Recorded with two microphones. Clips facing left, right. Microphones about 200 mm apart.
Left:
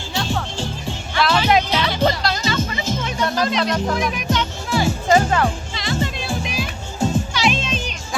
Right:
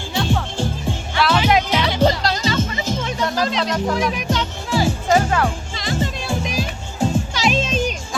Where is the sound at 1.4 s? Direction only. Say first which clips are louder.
Left 1 dB; 15° right (ahead or behind).